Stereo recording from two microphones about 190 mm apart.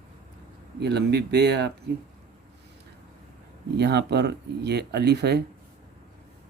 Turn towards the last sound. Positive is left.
turn(degrees=-60)  # may be behind; listen again after turning